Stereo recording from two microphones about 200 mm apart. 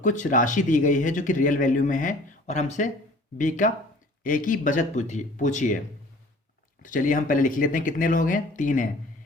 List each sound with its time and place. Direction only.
0.0 s speech: 40° left (ahead or behind)
6.8 s speech: 40° left (ahead or behind)